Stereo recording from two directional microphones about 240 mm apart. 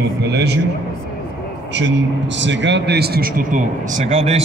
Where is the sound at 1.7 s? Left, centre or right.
Right.